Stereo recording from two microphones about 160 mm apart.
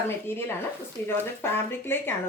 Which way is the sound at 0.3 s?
15° left (ahead or behind).